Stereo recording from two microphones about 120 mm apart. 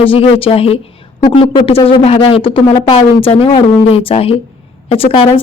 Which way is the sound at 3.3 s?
55° left (ahead or behind).